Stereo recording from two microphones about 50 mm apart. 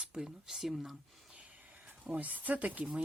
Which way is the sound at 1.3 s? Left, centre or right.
Right.